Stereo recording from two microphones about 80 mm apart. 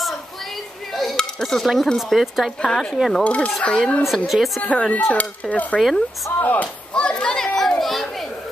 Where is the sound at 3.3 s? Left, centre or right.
Centre.